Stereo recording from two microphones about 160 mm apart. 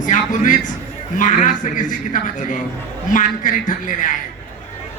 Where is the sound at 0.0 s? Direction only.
50° left (ahead or behind).